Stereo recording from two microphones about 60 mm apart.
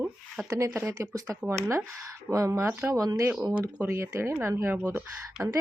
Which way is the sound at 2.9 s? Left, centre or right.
Right.